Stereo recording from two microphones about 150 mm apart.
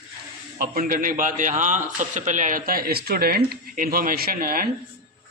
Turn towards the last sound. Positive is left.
turn(degrees=-70)  # may be behind; listen again after turning